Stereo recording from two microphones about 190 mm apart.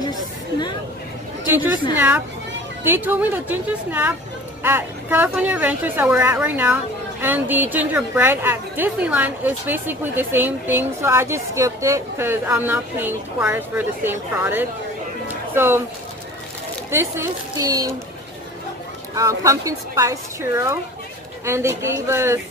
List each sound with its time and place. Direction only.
2.0 s a woman's voice: 10° right (ahead or behind)
16.9 s a woman's voice: 15° right (ahead or behind)
19.1 s a woman's voice: 15° right (ahead or behind)